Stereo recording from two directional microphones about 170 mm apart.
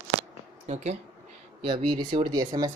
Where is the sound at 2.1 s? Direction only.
25° right (ahead or behind).